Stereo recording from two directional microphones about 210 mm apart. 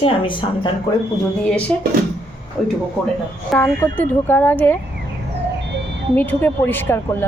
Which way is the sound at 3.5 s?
5° left (ahead or behind).